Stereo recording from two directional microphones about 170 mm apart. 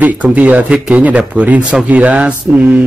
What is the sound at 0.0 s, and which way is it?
Speech, 10° right (ahead or behind).